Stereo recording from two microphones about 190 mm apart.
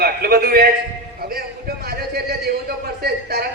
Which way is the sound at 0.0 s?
50° right (ahead or behind).